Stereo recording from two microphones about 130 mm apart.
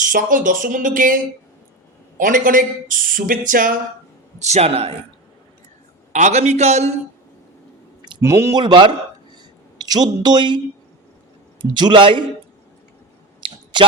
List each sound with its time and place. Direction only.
0.1 s speech: 90° right
4.4 s a man's voice: 60° right (ahead or behind)
6.1 s a man's voice: 65° right (ahead or behind)
8.2 s speech: 20° right (ahead or behind)
8.5 s speech: 35° right (ahead or behind)
11.7 s speech: 35° right (ahead or behind)
13.4 s a sound: 40° right (ahead or behind)